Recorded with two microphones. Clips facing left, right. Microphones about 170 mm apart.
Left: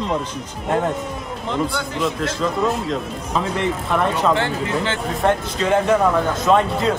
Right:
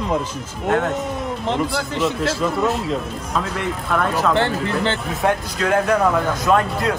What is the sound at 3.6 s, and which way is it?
Speech, centre (ahead or behind).